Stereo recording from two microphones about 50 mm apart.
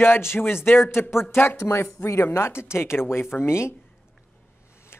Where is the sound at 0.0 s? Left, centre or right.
Left.